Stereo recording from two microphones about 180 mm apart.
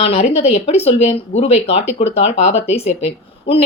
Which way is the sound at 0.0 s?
30° left (ahead or behind).